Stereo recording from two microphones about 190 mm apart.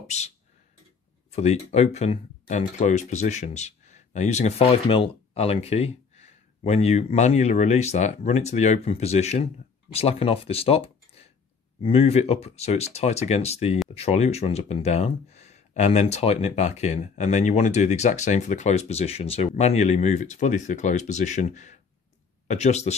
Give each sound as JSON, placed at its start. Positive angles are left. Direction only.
{"t": 0.0, "sound": "speech", "side_deg": 35}
{"t": 1.3, "sound": "speech", "side_deg": 35}